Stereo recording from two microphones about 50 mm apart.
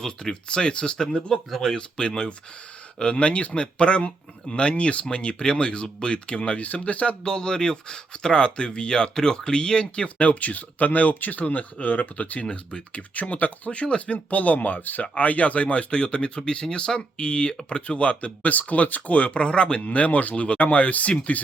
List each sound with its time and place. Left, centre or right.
0.0 s speech: centre
1.0 s speech: centre
1.7 s speech: centre; by 15.0 s left
15.0 s speech: left